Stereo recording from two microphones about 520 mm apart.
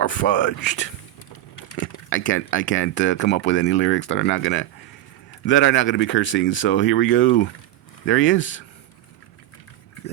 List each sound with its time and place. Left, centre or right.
0.0 s speech: left